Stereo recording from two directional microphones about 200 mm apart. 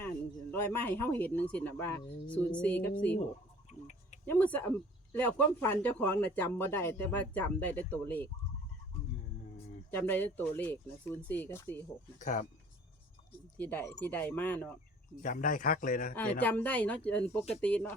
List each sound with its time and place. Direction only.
0.5 s speech: 10° left (ahead or behind)
3.7 s a sound: 35° left (ahead or behind)
4.3 s speech: 5° left (ahead or behind)
9.9 s speech: 10° left (ahead or behind)
12.2 s speech: 40° left (ahead or behind)
13.6 s speech: 10° left (ahead or behind)
15.2 s speech: 40° left (ahead or behind)
16.4 s speech: 10° left (ahead or behind)